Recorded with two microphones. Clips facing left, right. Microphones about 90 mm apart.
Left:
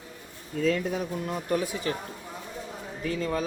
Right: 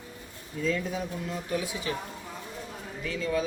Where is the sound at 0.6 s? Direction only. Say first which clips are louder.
Left 3 dB; 55° left (ahead or behind).